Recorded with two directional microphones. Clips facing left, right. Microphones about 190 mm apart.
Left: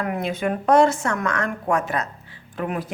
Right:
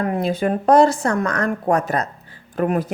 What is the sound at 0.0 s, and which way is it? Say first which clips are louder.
Speech: right 4 dB; 35° right (ahead or behind).